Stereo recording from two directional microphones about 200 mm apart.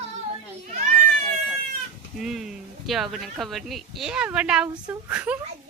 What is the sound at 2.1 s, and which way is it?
Speech, centre (ahead or behind).